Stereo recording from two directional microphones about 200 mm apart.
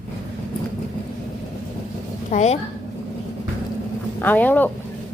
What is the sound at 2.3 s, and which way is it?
Speech, 35° left (ahead or behind).